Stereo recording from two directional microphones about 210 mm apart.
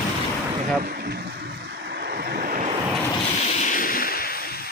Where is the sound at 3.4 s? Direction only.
35° left (ahead or behind).